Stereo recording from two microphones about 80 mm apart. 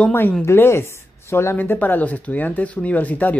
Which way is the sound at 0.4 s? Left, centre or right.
Left.